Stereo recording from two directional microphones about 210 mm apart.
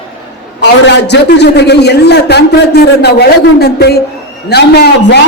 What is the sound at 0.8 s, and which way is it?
A man's voice, 55° left (ahead or behind).